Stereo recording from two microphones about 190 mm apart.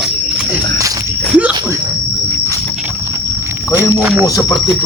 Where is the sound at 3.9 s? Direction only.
10° right (ahead or behind).